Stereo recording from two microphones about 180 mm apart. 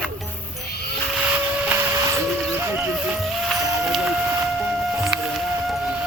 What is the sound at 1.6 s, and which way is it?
Printer, 10° right (ahead or behind).